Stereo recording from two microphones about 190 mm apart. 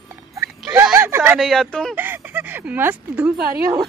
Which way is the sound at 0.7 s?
10° right (ahead or behind).